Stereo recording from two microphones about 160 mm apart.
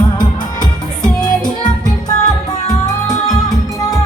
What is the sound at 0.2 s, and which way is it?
Music, 25° left (ahead or behind).